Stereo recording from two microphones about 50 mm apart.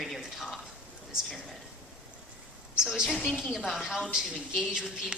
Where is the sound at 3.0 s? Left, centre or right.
Centre.